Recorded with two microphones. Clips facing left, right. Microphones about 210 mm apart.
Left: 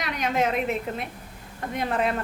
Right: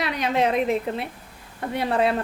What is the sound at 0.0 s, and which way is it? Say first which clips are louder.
A woman's voice: right 3 dB; 35° right (ahead or behind).